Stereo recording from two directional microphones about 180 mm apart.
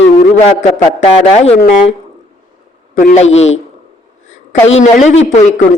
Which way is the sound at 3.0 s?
45° left (ahead or behind).